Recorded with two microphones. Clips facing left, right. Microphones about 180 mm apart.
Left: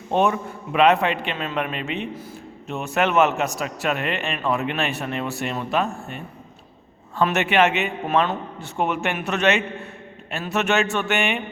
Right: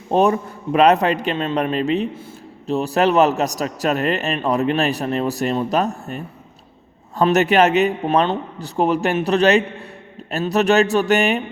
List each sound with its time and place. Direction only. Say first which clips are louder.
0.1 s a man's voice: right 4 dB; 35° right (ahead or behind)